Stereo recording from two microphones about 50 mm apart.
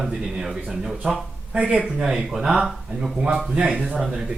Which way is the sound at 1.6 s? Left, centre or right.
Right.